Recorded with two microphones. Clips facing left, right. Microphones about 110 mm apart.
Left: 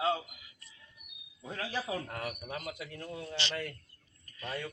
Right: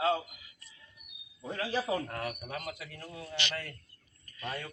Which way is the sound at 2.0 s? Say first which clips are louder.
Right 2 dB; 10° left (ahead or behind).